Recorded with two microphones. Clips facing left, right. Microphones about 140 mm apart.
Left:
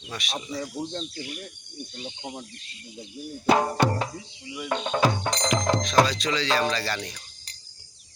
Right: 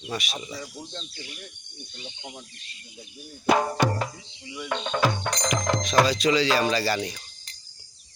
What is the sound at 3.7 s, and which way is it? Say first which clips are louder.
Speech: left 1 dB; centre (ahead or behind).